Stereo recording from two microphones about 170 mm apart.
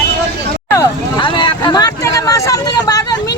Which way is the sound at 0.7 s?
25° left (ahead or behind).